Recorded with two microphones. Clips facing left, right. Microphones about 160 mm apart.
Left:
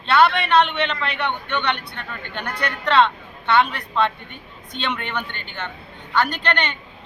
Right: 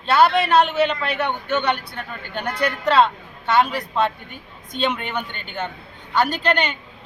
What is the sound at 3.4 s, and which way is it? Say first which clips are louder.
Speech: even; 40° right (ahead or behind).